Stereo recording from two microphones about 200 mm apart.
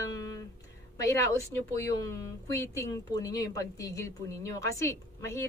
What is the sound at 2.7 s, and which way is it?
Speech, 15° left (ahead or behind).